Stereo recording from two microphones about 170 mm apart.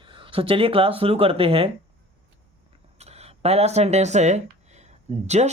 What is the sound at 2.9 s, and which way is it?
Speech, 40° right (ahead or behind).